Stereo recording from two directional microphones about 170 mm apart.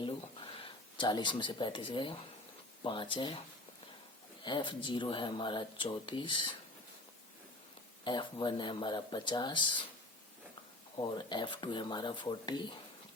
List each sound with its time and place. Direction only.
0.6 s speech: 30° left (ahead or behind)
4.4 s speech: 25° left (ahead or behind)
8.0 s speech: 25° left (ahead or behind)
10.9 s speech: 25° left (ahead or behind)